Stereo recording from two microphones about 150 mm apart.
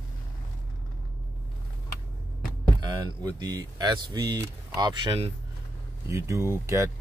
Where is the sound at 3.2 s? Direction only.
25° right (ahead or behind).